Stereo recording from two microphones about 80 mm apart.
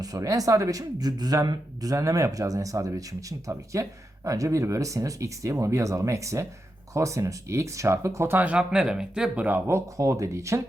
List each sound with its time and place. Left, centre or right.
0.0 s speech: right
8.4 s speech: centre
9.6 s speech: right